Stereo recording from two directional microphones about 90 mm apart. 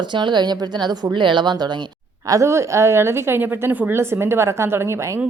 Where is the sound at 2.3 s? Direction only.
35° right (ahead or behind).